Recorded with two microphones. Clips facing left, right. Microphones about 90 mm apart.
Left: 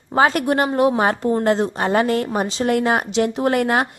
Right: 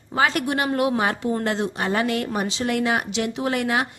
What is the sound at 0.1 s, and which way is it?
A woman's voice, 40° left (ahead or behind).